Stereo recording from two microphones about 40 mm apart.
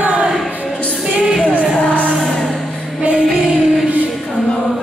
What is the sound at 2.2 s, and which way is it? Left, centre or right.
Vehicle, centre.